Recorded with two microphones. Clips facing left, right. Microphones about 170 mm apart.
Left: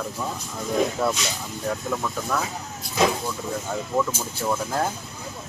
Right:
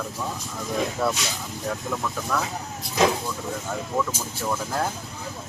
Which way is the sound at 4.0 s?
10° left (ahead or behind).